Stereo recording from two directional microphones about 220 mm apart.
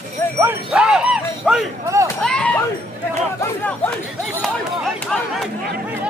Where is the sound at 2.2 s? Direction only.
5° left (ahead or behind).